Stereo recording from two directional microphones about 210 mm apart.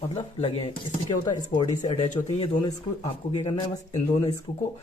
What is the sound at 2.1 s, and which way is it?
Speech, 35° left (ahead or behind).